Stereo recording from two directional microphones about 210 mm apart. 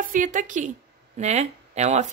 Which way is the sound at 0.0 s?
40° right (ahead or behind).